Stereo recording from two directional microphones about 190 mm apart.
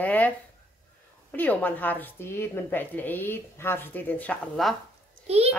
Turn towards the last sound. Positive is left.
turn(degrees=-30)  # may be behind; listen again after turning